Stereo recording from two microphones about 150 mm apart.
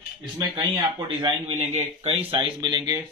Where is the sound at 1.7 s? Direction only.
40° right (ahead or behind).